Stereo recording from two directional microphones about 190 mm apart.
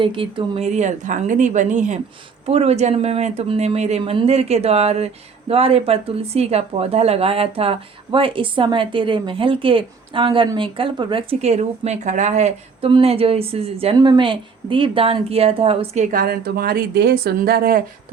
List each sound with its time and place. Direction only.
0.0 s speech: 25° right (ahead or behind)
16.1 s speech: 50° right (ahead or behind)